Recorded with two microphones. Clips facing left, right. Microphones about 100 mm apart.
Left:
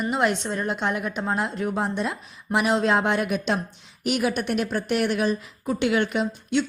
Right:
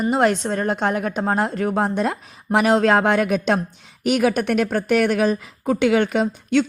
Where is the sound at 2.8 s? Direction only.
70° right (ahead or behind).